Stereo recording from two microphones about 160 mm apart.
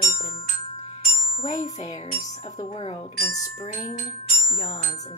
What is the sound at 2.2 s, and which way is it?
Speech, 25° left (ahead or behind).